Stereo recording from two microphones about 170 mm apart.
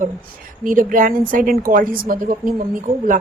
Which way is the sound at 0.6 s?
50° right (ahead or behind).